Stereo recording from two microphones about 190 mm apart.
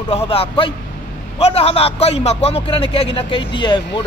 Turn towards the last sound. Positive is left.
turn(degrees=25)  # may be behind; listen again after turning